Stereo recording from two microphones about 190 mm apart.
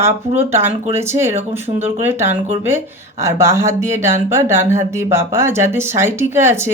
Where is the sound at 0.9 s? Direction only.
15° right (ahead or behind).